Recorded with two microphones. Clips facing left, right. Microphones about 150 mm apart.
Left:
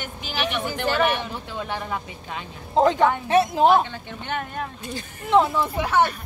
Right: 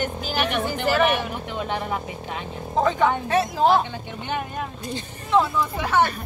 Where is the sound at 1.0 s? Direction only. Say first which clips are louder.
Right 2 dB; 20° right (ahead or behind).